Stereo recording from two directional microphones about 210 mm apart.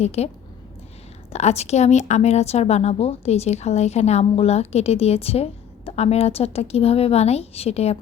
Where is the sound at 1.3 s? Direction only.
30° left (ahead or behind).